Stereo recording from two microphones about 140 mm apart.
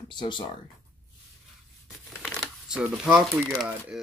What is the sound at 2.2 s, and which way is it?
Shuffling cards, 5° right (ahead or behind).